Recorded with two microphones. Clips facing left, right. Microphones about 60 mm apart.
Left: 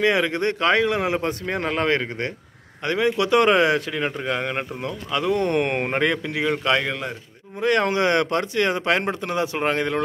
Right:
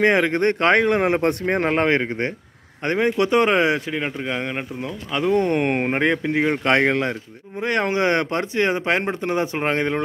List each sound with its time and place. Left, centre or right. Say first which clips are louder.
0.0 s speech: right 3 dB; right
4.0 s speech: left 1 dB; centre
5.1 s speech: right 2 dB; right
6.7 s speech: right 5 dB; right
7.6 s speech: left 1 dB; right